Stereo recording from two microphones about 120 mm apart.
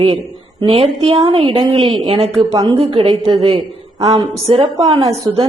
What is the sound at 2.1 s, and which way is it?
Speech, 55° right (ahead or behind).